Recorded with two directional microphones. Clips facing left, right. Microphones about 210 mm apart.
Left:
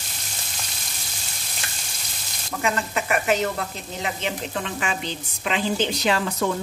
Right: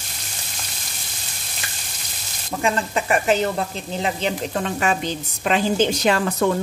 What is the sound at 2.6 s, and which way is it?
Speech, 30° right (ahead or behind).